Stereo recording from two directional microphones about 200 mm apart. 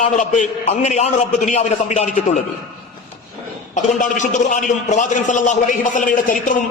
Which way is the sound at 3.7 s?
40° left (ahead or behind).